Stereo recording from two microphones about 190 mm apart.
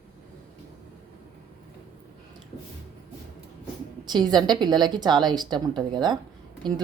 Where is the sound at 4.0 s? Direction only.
20° right (ahead or behind).